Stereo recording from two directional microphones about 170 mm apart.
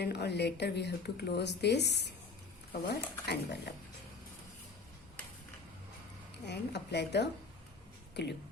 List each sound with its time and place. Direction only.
0.0 s speech: 75° left (ahead or behind)
6.4 s speech: 80° left